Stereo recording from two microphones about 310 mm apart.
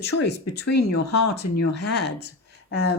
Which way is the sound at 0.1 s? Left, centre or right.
Left.